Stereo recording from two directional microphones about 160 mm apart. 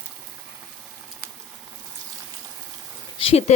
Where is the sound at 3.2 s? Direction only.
35° left (ahead or behind).